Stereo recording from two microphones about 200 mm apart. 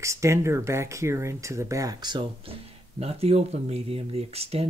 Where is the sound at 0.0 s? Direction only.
15° right (ahead or behind).